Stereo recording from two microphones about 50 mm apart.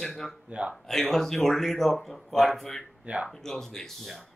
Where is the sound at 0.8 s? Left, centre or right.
Centre.